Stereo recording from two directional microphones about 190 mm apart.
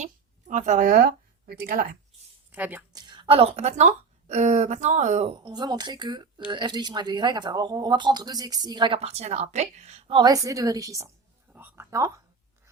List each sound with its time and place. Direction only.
0.0 s speech: 40° right (ahead or behind)
2.5 s speech: 10° right (ahead or behind)
2.9 s a woman's voice: 25° right (ahead or behind)
5.4 s speech: 20° right (ahead or behind)